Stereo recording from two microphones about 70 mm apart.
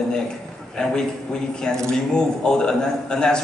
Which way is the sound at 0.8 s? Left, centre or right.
Centre.